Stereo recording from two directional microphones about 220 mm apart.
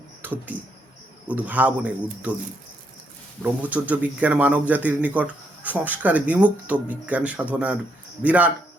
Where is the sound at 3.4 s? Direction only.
5° right (ahead or behind).